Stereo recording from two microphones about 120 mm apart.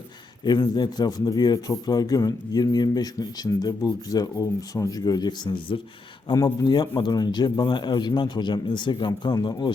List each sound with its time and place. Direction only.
0.4 s a man's voice: 35° left (ahead or behind)